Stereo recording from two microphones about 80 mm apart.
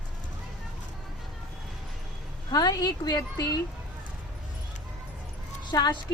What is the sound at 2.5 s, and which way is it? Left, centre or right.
Speech, left.